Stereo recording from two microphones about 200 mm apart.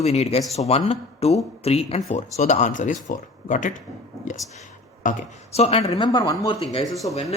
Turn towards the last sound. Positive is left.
turn(degrees=0)  # may be behind; listen again after turning